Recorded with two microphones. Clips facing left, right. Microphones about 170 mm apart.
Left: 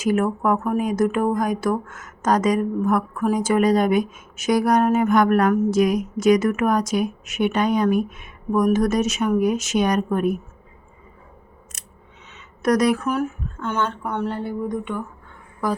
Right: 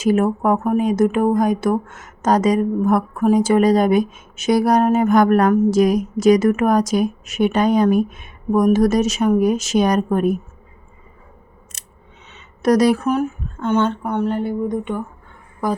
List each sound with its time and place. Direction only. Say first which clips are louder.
0.0 s speech: right 4 dB; 25° right (ahead or behind)
12.3 s speech: right 4 dB; 30° right (ahead or behind)